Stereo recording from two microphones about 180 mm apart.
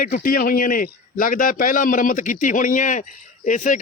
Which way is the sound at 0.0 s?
50° left (ahead or behind).